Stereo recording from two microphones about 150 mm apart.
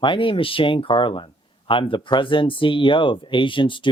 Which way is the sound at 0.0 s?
35° left (ahead or behind).